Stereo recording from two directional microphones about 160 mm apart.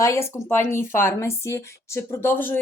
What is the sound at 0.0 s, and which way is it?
Speech, 20° left (ahead or behind).